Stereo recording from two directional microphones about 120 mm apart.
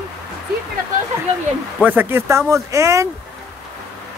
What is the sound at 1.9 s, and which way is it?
Speech, 20° right (ahead or behind).